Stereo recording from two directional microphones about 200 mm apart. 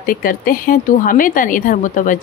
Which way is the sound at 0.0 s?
45° left (ahead or behind).